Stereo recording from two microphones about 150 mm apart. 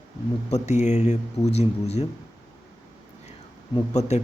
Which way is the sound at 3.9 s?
50° left (ahead or behind).